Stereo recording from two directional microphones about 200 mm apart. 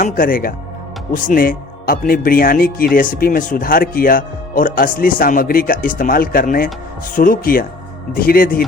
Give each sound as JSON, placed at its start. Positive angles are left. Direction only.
{"t": 0.0, "sound": "speech", "side_deg": 45}